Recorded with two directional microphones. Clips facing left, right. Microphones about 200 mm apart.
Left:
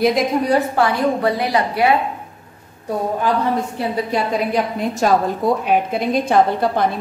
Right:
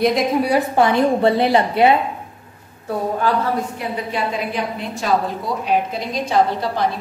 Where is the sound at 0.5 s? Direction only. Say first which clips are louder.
Even; 20° right (ahead or behind).